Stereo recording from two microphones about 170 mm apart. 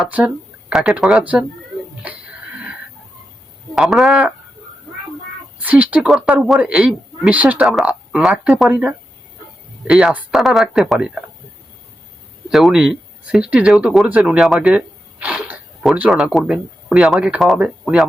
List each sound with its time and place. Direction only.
0.0 s a woman's voice: 10° right (ahead or behind)
3.8 s speech: centre (ahead or behind)
5.6 s a woman's voice: 10° right (ahead or behind)
12.5 s speech: centre (ahead or behind)